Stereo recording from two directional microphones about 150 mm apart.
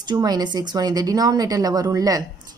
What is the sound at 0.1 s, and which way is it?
A woman's voice, 25° right (ahead or behind).